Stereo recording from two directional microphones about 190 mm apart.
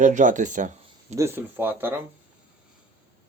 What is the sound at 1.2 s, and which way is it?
Speech, 10° right (ahead or behind).